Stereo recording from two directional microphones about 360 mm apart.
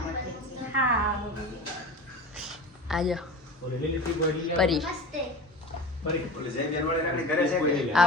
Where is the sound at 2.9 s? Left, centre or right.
Centre.